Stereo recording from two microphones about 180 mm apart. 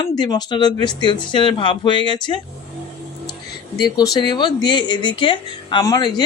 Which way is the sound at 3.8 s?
20° left (ahead or behind).